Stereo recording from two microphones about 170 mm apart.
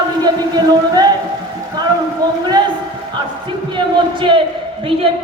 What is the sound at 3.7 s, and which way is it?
Speech, 30° right (ahead or behind).